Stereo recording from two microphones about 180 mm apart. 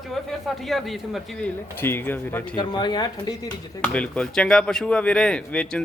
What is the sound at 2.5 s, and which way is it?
Speech, 25° left (ahead or behind).